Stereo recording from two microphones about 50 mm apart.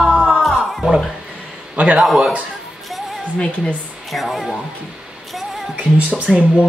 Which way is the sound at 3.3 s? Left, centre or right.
Centre.